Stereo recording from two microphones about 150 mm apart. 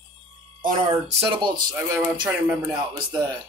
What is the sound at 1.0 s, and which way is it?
Speech, 40° right (ahead or behind).